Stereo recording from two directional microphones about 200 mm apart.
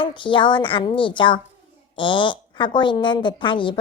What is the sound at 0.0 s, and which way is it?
A woman's voice, 25° left (ahead or behind).